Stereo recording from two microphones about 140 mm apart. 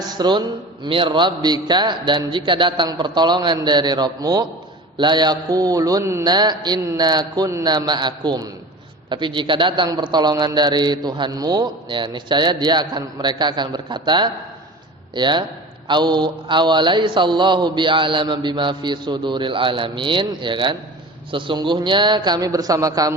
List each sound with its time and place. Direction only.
0.1 s a man's voice: 30° right (ahead or behind)